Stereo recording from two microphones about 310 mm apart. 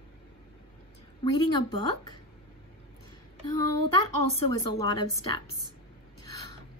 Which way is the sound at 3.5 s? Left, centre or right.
Left.